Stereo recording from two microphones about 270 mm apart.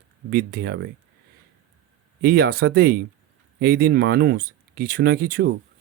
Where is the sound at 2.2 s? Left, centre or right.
Right.